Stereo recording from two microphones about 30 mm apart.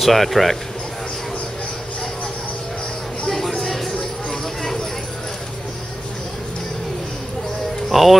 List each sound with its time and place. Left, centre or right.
0.0 s speech: centre
3.3 s a sound: centre
4.3 s clip-clop: centre
7.9 s speech: centre